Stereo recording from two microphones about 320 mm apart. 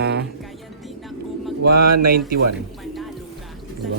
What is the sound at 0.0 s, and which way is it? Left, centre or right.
Music, right.